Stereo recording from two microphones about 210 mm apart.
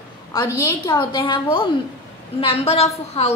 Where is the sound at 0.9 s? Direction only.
20° left (ahead or behind).